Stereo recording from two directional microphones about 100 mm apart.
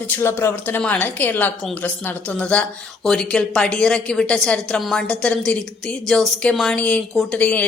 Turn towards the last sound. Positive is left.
turn(degrees=15)  # may be behind; listen again after turning